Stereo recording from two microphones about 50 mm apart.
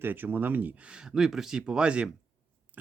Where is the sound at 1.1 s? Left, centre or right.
Centre.